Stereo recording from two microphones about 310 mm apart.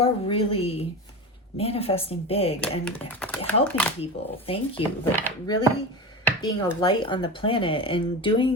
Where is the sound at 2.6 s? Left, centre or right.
Centre.